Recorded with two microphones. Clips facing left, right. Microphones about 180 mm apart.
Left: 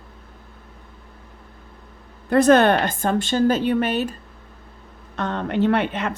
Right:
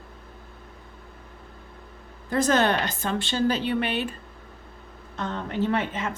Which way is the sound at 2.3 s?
60° left (ahead or behind).